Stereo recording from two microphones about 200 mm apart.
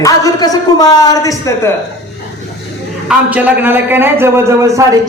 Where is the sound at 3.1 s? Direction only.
10° right (ahead or behind).